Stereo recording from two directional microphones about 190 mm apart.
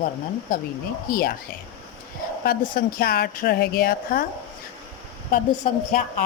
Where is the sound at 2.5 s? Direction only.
50° left (ahead or behind).